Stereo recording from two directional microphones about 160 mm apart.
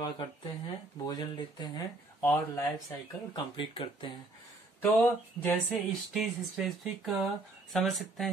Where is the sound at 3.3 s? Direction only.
30° left (ahead or behind).